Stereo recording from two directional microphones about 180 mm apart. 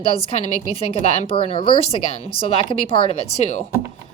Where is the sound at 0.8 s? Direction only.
35° left (ahead or behind).